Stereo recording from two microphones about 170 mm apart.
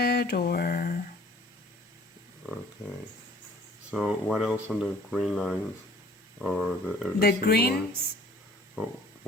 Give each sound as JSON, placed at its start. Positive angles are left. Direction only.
{"t": 0.0, "sound": "a sound", "side_deg": 70}
{"t": 3.9, "sound": "speech", "side_deg": 0}
{"t": 7.2, "sound": "speech", "side_deg": 65}